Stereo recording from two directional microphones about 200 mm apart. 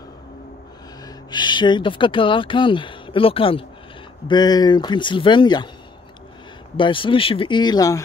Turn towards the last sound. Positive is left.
turn(degrees=20)  # may be behind; listen again after turning